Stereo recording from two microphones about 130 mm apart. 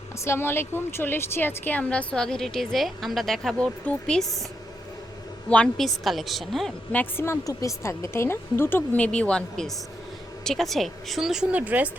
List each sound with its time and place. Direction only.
0.3 s a woman's voice: 20° left (ahead or behind)
5.5 s speech: 5° left (ahead or behind)
6.9 s a woman's voice: 15° left (ahead or behind); by 11.9 s 10° right (ahead or behind)